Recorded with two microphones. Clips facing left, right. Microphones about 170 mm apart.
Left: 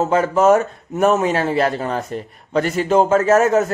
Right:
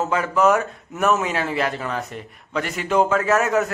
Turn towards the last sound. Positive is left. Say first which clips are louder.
# left 5 dB
turn(degrees=30)  # may be behind; listen again after turning